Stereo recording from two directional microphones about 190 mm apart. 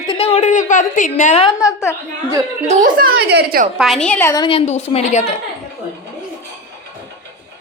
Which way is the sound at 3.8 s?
Centre (ahead or behind).